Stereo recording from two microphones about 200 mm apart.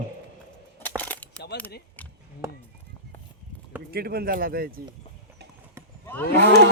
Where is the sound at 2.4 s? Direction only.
15° right (ahead or behind).